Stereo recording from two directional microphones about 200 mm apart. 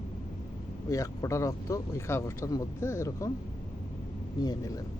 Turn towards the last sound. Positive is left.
turn(degrees=20)  # may be behind; listen again after turning